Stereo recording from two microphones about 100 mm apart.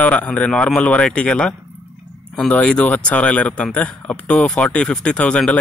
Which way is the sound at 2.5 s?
10° left (ahead or behind).